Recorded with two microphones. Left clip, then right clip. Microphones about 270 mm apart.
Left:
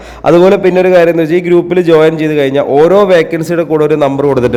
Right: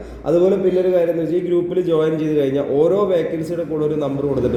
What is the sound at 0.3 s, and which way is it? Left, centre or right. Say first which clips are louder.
A man's voice: left 10 dB; left.